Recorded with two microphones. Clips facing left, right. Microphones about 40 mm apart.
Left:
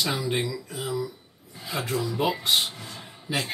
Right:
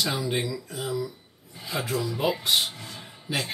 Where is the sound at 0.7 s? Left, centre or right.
Centre.